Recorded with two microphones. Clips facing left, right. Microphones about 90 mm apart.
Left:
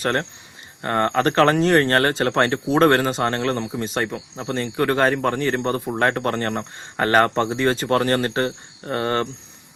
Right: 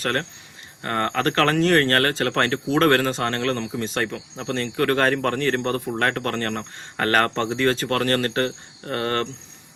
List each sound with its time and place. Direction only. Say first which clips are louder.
0.0 s speech: left 3 dB; 20° left (ahead or behind)